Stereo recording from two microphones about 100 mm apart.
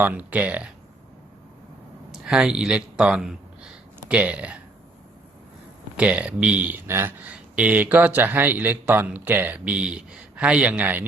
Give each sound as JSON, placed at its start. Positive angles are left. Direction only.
{"t": 0.0, "sound": "speech", "side_deg": -15}
{"t": 2.1, "sound": "speech", "side_deg": -5}
{"t": 6.0, "sound": "speech", "side_deg": -15}